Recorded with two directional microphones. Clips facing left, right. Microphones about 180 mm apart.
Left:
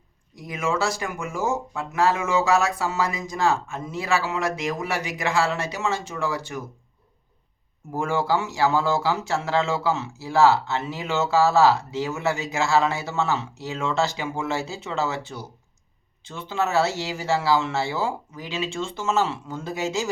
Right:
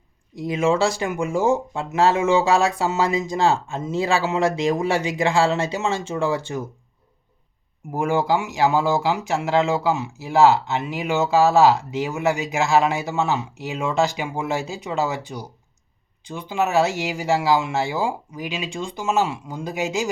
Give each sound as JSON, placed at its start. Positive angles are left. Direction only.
{"t": 0.3, "sound": "speech", "side_deg": -25}
{"t": 7.9, "sound": "speech", "side_deg": -15}